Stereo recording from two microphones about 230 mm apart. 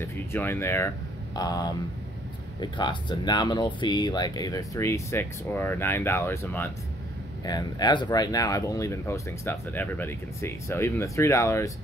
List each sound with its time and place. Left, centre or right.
0.0 s speech: centre